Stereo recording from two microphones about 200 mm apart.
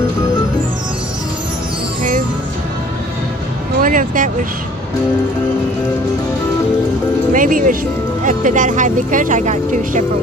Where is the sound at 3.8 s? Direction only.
40° right (ahead or behind).